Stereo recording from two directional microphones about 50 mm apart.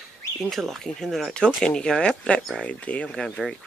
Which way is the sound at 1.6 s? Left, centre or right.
Centre.